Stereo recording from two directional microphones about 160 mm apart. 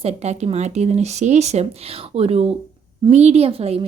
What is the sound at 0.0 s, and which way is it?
A woman's voice, 40° right (ahead or behind).